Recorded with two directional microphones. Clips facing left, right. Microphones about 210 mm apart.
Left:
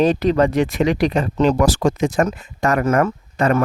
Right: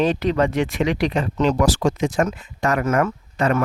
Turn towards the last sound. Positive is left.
turn(degrees=40)  # may be behind; listen again after turning